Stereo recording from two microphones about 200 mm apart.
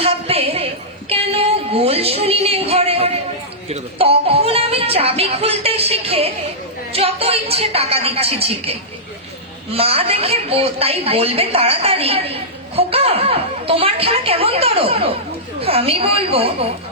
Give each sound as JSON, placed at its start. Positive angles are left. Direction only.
{"t": 0.0, "sound": "a sound", "side_deg": -30}
{"t": 1.1, "sound": "music", "side_deg": -30}
{"t": 3.7, "sound": "a woman's voice", "side_deg": -30}
{"t": 9.7, "sound": "a woman's voice", "side_deg": -30}